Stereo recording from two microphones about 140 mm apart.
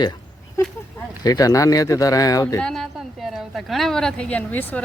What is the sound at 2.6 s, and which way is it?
A woman's voice, 5° left (ahead or behind).